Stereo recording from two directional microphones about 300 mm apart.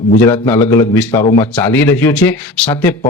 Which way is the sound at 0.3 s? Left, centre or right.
Centre.